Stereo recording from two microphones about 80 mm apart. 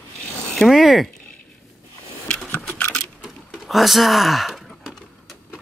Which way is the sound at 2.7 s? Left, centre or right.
Centre.